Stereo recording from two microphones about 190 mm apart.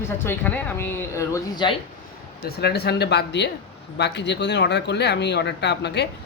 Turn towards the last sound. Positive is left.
turn(degrees=65)  # may be behind; listen again after turning